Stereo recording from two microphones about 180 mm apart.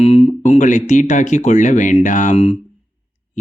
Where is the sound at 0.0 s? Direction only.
35° left (ahead or behind).